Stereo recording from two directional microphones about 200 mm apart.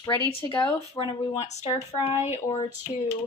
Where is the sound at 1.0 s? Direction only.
25° left (ahead or behind).